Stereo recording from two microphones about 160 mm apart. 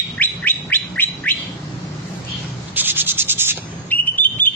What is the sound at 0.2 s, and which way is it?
Bird, 10° left (ahead or behind).